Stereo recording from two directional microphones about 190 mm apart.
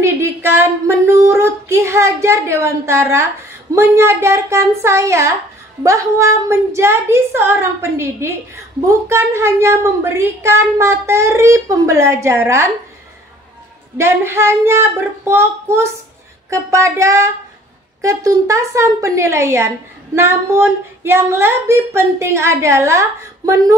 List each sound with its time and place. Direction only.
0.0 s a woman's voice: 15° right (ahead or behind)
13.9 s a woman's voice: 15° right (ahead or behind)